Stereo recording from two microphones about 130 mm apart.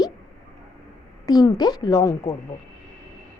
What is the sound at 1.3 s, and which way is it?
A woman's voice, 30° left (ahead or behind).